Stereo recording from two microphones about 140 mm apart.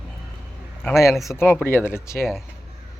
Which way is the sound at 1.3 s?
15° left (ahead or behind).